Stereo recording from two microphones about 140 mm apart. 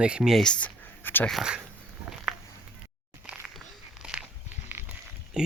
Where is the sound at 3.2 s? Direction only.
5° right (ahead or behind).